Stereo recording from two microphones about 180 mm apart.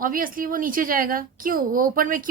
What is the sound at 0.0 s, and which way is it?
A woman's voice, 50° right (ahead or behind).